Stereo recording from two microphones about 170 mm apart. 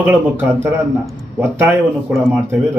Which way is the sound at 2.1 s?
15° right (ahead or behind).